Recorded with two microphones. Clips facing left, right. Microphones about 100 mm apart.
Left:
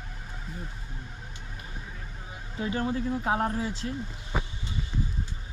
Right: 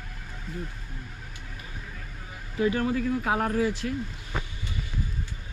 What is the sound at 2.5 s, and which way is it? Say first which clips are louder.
Speech: right 4 dB; 25° left (ahead or behind).